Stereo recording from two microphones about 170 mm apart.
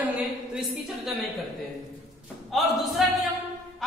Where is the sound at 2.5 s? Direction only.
Centre (ahead or behind).